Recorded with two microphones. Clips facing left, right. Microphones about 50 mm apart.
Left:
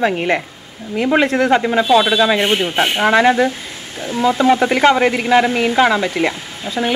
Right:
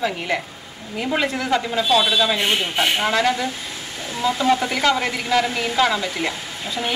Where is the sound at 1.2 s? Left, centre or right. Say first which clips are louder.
Left 7 dB; left.